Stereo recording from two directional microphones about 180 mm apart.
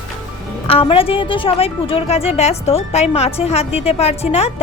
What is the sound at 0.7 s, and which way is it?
A woman's voice, 30° left (ahead or behind).